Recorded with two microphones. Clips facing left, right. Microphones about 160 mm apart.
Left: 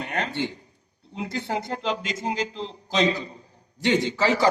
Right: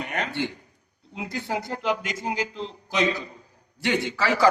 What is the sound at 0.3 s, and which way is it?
A man's voice, 20° left (ahead or behind).